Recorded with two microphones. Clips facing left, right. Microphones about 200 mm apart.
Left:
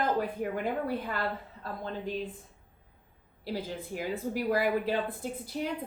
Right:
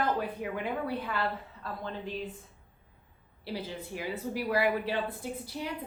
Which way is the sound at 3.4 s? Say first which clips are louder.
Left 2 dB; 45° left (ahead or behind).